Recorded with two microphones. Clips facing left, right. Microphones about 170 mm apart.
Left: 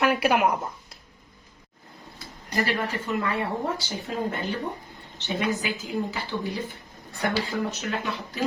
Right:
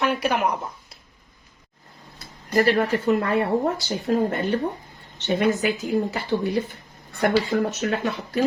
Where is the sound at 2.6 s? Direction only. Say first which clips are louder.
Right 8 dB; 50° right (ahead or behind).